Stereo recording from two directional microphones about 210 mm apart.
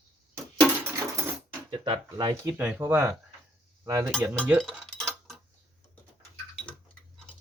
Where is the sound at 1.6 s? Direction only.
20° right (ahead or behind).